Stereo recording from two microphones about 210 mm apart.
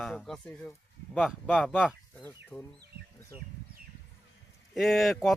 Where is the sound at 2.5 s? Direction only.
5° left (ahead or behind).